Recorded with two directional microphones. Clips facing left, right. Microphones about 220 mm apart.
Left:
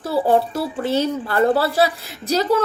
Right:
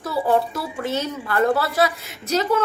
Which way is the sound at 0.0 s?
30° left (ahead or behind).